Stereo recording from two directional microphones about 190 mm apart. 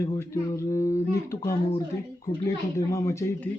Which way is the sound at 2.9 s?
15° left (ahead or behind).